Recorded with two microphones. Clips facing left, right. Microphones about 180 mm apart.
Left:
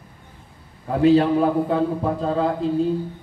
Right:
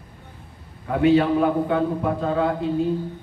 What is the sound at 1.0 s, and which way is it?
A man's voice, 35° left (ahead or behind).